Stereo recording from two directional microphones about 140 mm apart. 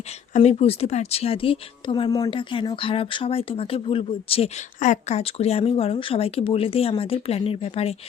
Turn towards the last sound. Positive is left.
turn(degrees=45)  # may be behind; listen again after turning